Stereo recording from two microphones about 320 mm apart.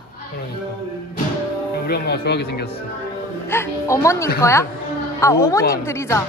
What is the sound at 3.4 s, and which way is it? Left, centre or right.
Speech, centre.